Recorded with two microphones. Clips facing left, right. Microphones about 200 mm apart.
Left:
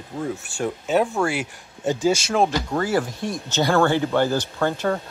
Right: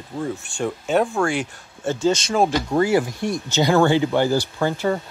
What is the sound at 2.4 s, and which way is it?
Speech, 15° right (ahead or behind).